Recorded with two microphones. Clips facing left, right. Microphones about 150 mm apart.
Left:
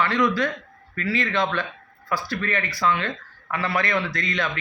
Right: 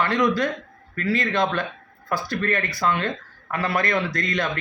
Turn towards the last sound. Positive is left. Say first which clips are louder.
# right 2 dB
turn(degrees=-45)  # may be behind; listen again after turning